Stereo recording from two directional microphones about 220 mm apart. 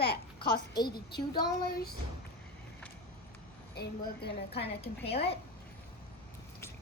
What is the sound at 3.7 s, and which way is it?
Speech, 45° left (ahead or behind).